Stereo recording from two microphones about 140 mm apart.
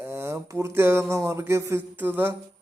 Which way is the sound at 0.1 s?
15° right (ahead or behind).